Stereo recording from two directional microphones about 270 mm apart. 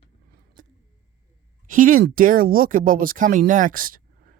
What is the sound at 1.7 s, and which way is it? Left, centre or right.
Speech, right.